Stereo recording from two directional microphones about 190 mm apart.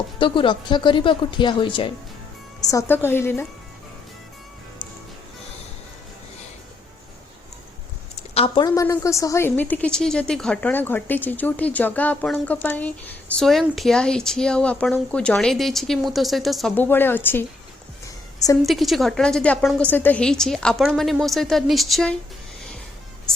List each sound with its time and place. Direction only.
0.2 s speech: 25° left (ahead or behind)
2.6 s a woman's voice: 15° left (ahead or behind)
8.4 s a woman's voice: 20° left (ahead or behind)
18.6 s a woman's voice: centre (ahead or behind)